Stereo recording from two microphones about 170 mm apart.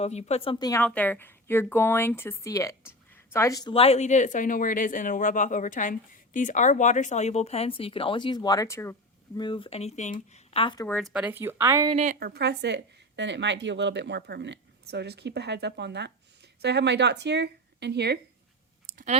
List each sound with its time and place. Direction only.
0.0 s speech: 40° left (ahead or behind)
0.6 s speech: 20° left (ahead or behind)
3.7 s speech: 35° left (ahead or behind); by 9.0 s 15° left (ahead or behind)
9.4 s speech: 30° left (ahead or behind)
10.8 s speech: 5° left (ahead or behind)
11.1 s speech: 10° right (ahead or behind)
11.9 s a woman's voice: 40° right (ahead or behind)
12.2 s speech: 75° right (ahead or behind)
18.9 s clicking: 50° right (ahead or behind)